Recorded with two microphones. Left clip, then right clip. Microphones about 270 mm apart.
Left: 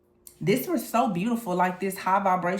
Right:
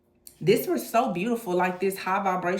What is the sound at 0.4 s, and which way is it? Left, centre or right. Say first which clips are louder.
Speech: right 3 dB; centre.